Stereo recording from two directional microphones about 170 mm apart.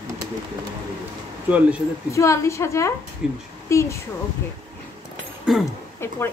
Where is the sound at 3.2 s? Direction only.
5° right (ahead or behind).